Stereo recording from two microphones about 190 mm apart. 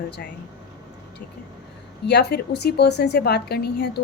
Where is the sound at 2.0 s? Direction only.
60° left (ahead or behind).